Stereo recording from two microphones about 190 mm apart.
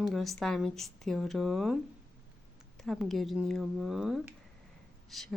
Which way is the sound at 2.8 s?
Centre (ahead or behind).